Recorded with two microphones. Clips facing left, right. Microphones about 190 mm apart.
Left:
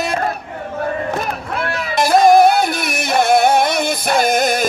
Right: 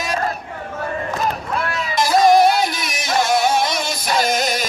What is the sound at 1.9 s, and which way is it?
Music, 55° left (ahead or behind).